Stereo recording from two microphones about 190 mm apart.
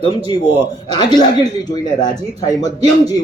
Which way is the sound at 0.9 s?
20° left (ahead or behind).